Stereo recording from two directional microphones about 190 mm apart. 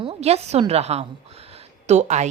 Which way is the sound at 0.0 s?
30° right (ahead or behind).